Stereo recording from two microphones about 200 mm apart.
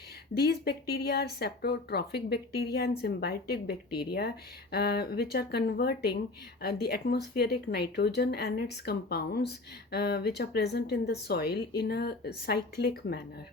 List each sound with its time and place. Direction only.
0.3 s speech: 50° left (ahead or behind)